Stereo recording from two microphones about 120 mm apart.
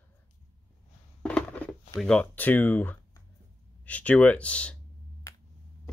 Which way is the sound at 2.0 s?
10° left (ahead or behind).